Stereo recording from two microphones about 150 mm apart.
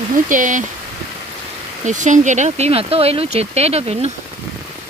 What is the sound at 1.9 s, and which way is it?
Speech, 55° right (ahead or behind).